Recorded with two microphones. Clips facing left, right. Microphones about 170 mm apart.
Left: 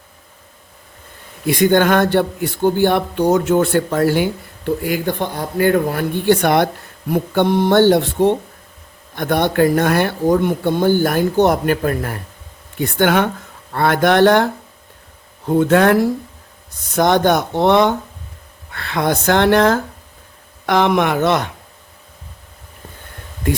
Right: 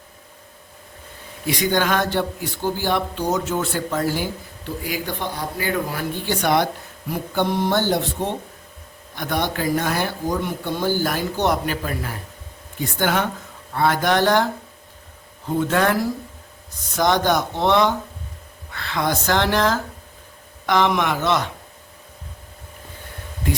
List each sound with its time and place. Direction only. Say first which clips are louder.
1.5 s a man's voice: left 7 dB; 55° left (ahead or behind)